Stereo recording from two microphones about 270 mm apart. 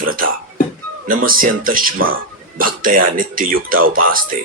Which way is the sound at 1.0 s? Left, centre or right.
Right.